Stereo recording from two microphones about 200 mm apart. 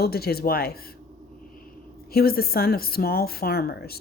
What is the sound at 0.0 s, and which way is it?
Speech, 50° left (ahead or behind).